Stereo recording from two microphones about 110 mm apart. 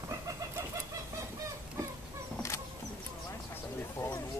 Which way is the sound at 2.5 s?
25° left (ahead or behind).